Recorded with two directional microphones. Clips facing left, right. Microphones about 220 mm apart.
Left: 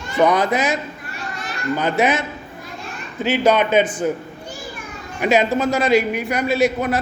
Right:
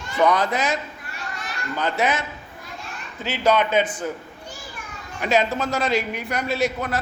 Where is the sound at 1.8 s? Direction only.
15° left (ahead or behind).